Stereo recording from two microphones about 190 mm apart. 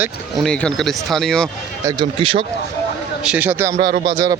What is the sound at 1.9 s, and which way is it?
Speech, 25° right (ahead or behind).